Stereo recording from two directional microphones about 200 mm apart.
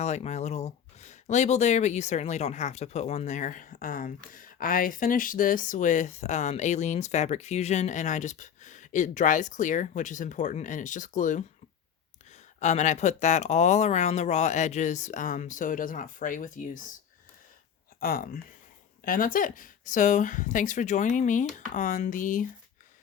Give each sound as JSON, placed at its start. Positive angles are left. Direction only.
{"t": 0.0, "sound": "speech", "side_deg": 35}
{"t": 12.5, "sound": "speech", "side_deg": 35}
{"t": 18.0, "sound": "speech", "side_deg": 45}